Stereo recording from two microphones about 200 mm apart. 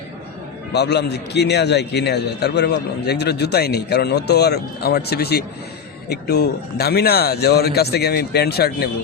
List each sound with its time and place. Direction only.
0.7 s a man's voice: 55° left (ahead or behind)